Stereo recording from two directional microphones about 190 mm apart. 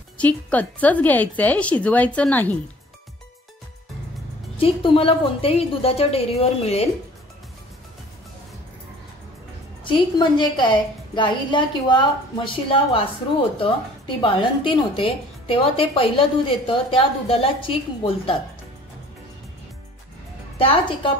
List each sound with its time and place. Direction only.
0.2 s speech: 10° left (ahead or behind)
4.6 s a woman's voice: 30° left (ahead or behind)
9.8 s a woman's voice: 25° left (ahead or behind)
20.5 s a woman's voice: 30° left (ahead or behind)